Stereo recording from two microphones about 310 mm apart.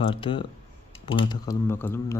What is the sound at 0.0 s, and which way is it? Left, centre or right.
Speech, centre.